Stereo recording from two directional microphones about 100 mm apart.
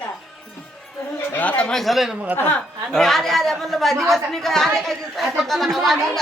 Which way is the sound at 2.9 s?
5° left (ahead or behind).